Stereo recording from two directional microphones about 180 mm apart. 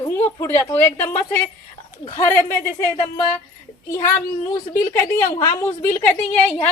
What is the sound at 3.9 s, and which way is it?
A woman's voice, 15° left (ahead or behind).